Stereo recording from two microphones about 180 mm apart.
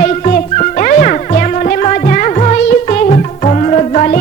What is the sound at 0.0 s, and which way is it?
Music, 45° left (ahead or behind).